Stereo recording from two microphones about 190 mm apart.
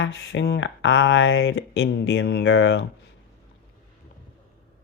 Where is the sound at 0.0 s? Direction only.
75° left (ahead or behind).